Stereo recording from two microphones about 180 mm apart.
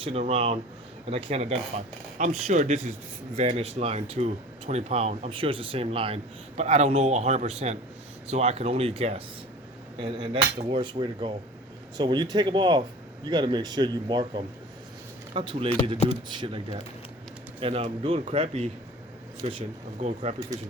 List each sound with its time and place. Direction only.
0.0 s speech: 35° right (ahead or behind)